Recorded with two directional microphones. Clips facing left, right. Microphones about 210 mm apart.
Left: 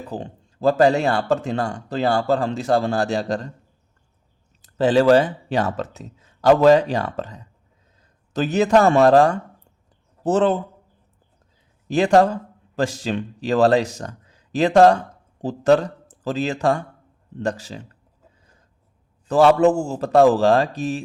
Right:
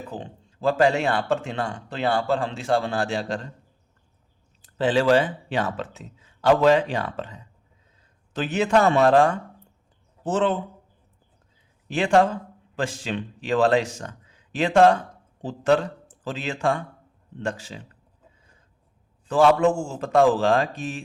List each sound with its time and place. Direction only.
0.1 s speech: 40° left (ahead or behind)
4.6 s speech: 40° left (ahead or behind)
11.9 s speech: 40° left (ahead or behind)
19.3 s speech: 40° left (ahead or behind)